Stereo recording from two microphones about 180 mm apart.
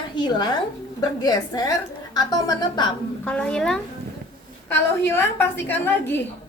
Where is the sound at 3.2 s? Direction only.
5° left (ahead or behind).